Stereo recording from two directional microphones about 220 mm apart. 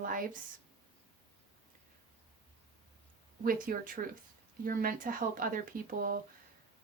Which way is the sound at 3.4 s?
40° right (ahead or behind).